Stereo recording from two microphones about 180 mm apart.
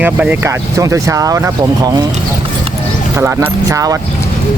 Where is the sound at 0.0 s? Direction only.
10° right (ahead or behind).